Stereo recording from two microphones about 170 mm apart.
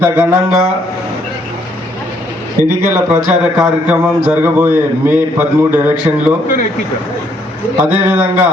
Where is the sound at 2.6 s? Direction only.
20° left (ahead or behind).